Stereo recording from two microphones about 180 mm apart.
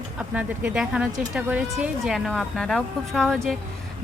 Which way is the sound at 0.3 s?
5° right (ahead or behind).